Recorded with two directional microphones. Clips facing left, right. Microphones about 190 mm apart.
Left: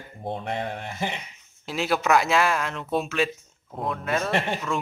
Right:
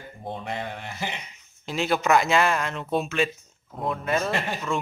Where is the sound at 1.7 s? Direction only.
5° left (ahead or behind).